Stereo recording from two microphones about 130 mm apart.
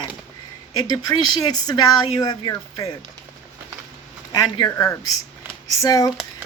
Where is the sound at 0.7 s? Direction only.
30° left (ahead or behind).